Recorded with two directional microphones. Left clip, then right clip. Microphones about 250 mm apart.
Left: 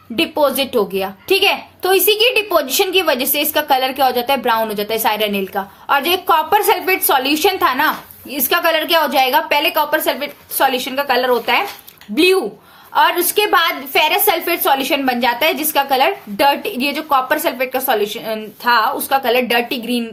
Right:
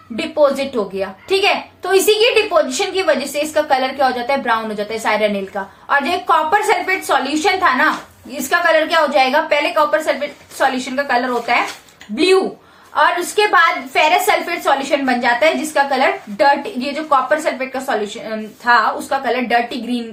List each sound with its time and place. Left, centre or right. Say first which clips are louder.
0.2 s a woman's voice: even; left
12.1 s a woman's voice: even; left